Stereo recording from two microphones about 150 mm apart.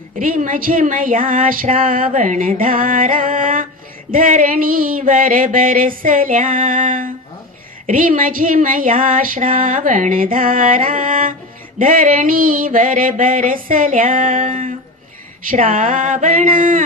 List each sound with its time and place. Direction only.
0.2 s speech: 65° right (ahead or behind)